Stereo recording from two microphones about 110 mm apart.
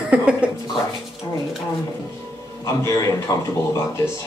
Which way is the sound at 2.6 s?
30° left (ahead or behind).